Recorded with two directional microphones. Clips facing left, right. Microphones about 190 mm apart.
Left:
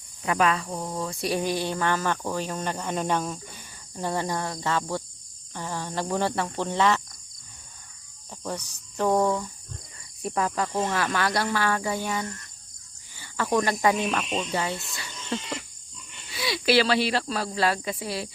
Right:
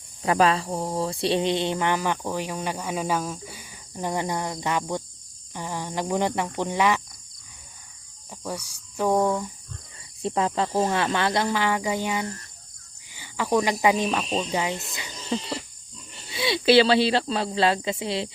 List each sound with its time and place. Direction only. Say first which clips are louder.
0.2 s cricket: right 3 dB; 35° right (ahead or behind); by 7.0 s 10° right (ahead or behind)
8.3 s cricket: even; 10° right (ahead or behind)
10.2 s speech: right 3 dB; 25° right (ahead or behind)
13.1 s cricket: right 2 dB; 15° right (ahead or behind)
14.3 s speech: right 2 dB; 35° right (ahead or behind)
14.5 s cricket: right 1 dB; 15° right (ahead or behind)
15.4 s speech: right 3 dB; 35° right (ahead or behind)